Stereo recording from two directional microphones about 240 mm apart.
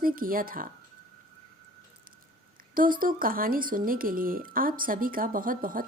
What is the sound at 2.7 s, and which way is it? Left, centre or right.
A woman's voice, right.